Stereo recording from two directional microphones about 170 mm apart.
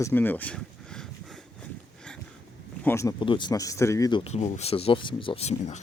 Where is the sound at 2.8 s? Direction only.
15° left (ahead or behind).